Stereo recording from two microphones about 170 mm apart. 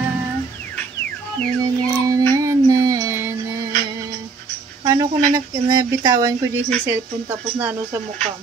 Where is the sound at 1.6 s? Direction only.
20° right (ahead or behind).